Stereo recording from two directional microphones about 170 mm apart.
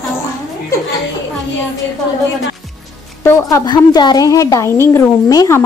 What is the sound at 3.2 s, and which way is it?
A woman's voice, 20° left (ahead or behind).